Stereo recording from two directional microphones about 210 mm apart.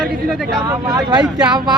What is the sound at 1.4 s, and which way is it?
Speech, 20° right (ahead or behind).